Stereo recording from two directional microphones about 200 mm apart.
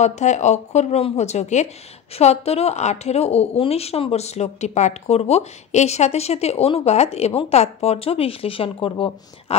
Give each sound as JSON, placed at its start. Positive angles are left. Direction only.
{"t": 0.0, "sound": "a woman's voice", "side_deg": 35}